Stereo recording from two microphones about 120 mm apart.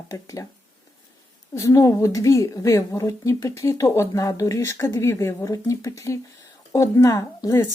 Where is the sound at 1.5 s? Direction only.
25° left (ahead or behind).